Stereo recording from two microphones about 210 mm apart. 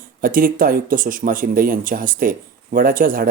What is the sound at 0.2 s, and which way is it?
Speech, 40° right (ahead or behind).